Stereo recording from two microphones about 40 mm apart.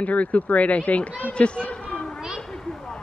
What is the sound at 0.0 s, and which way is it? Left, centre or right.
Speech, left.